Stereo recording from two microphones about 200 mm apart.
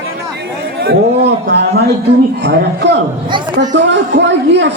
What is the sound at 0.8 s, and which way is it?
A man's voice, 55° right (ahead or behind).